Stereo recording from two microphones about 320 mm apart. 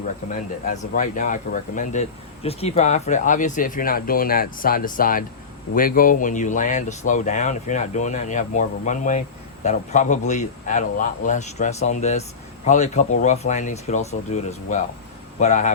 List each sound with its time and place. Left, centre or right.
0.7 s speech: left